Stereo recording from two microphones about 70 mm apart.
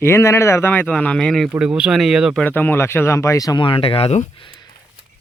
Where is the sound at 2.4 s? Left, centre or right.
Left.